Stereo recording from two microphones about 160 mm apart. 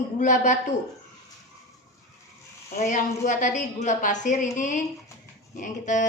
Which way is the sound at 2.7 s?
50° left (ahead or behind).